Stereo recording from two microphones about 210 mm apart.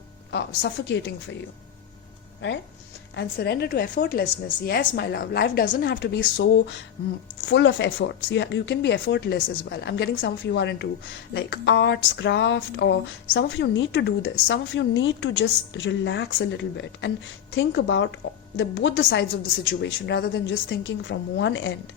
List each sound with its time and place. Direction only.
0.3 s speech: 55° left (ahead or behind)
3.2 s a woman's voice: 50° left (ahead or behind)
5.9 s speech: 55° left (ahead or behind)